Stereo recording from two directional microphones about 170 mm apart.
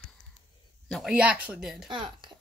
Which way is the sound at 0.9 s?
Centre (ahead or behind).